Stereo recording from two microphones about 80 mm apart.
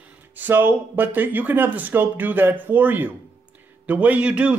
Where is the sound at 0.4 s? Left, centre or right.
Right.